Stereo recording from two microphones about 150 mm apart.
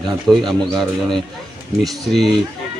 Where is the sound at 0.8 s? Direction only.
5° left (ahead or behind).